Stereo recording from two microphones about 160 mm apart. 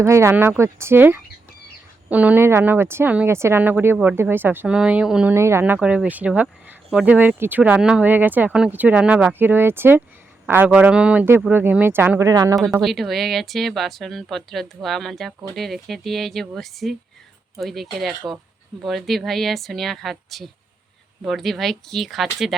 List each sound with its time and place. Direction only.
0.0 s speech: 15° right (ahead or behind)
12.8 s speech: centre (ahead or behind)